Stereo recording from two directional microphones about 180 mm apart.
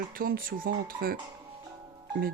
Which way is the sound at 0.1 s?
55° right (ahead or behind).